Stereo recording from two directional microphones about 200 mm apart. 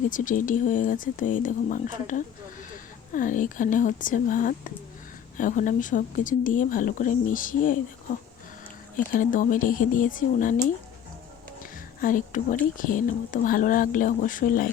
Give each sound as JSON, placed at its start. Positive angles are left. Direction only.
{"t": 0.1, "sound": "speech", "side_deg": 40}
{"t": 9.1, "sound": "speech", "side_deg": 40}
{"t": 11.9, "sound": "speech", "side_deg": 40}